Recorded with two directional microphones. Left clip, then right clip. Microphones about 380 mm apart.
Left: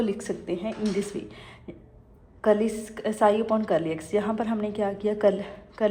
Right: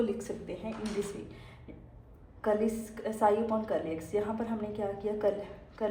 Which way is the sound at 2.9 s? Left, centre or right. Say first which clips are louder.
Left 6 dB; left.